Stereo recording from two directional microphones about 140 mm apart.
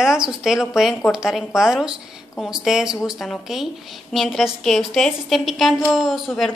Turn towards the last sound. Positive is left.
turn(degrees=0)  # may be behind; listen again after turning